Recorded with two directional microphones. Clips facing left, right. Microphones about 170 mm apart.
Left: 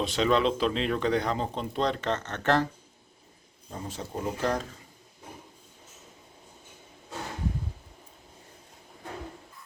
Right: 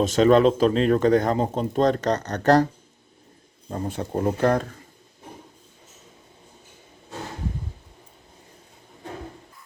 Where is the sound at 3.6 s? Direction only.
60° right (ahead or behind).